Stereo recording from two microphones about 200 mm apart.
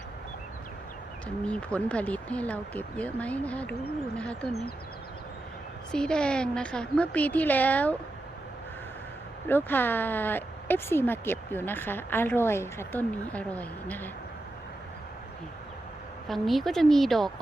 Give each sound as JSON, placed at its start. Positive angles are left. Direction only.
{"t": 1.5, "sound": "a woman's voice", "side_deg": 5}
{"t": 5.9, "sound": "a woman's voice", "side_deg": 5}
{"t": 9.5, "sound": "speech", "side_deg": 10}
{"t": 16.3, "sound": "a woman's voice", "side_deg": 0}